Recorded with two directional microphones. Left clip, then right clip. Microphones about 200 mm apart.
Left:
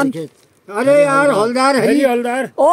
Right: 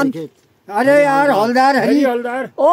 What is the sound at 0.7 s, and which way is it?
Speech, 20° right (ahead or behind).